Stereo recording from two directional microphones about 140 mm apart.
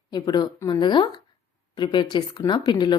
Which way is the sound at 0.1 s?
30° left (ahead or behind).